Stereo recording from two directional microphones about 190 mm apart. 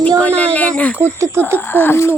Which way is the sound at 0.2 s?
5° left (ahead or behind).